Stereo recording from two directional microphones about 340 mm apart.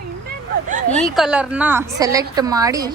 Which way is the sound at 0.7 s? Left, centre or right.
Right.